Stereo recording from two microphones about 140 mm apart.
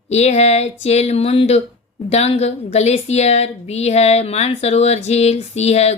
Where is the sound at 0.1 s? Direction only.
50° left (ahead or behind).